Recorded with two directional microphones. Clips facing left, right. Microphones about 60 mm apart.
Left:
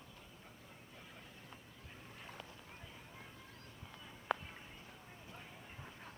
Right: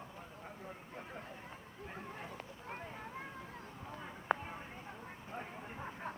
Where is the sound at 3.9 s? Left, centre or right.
Right.